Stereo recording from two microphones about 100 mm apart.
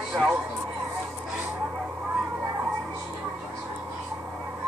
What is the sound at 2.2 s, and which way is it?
Children playing, 20° right (ahead or behind).